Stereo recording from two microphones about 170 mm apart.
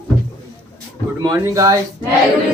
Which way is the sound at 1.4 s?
20° right (ahead or behind).